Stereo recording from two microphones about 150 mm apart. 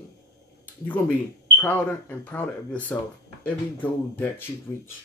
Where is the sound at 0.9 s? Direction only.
10° left (ahead or behind).